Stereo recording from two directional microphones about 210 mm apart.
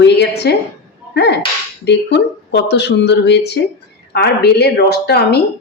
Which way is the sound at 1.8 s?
55° left (ahead or behind).